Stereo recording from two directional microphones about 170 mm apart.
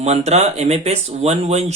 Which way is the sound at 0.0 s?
40° right (ahead or behind).